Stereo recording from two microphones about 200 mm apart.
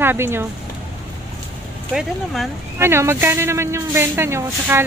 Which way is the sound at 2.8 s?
10° right (ahead or behind).